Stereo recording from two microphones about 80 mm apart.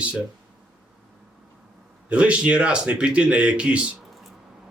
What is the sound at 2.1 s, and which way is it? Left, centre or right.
Speech, centre.